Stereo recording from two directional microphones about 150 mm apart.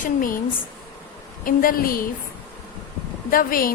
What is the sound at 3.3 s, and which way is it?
Speech, 70° left (ahead or behind).